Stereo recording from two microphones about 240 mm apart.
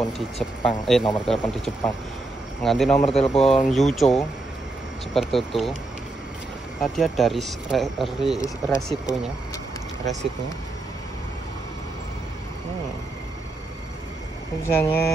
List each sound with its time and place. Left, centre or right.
0.4 s speech: centre
6.8 s speech: centre
8.4 s speech: centre
8.8 s speech: centre
14.8 s speech: centre